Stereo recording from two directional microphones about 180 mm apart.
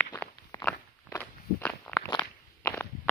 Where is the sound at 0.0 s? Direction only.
5° left (ahead or behind).